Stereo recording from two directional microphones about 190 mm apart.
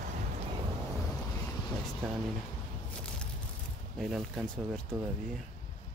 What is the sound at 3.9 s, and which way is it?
Speech, centre (ahead or behind).